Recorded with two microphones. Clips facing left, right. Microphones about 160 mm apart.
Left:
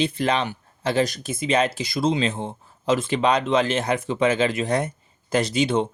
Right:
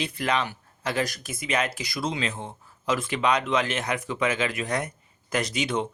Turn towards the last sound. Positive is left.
turn(degrees=30)  # may be behind; listen again after turning